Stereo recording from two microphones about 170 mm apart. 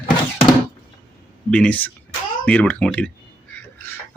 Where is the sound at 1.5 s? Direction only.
5° left (ahead or behind).